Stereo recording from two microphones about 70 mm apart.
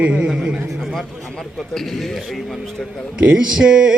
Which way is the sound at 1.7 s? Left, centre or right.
Centre.